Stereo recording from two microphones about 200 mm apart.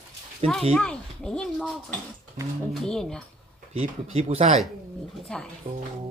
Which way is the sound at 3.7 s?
30° right (ahead or behind).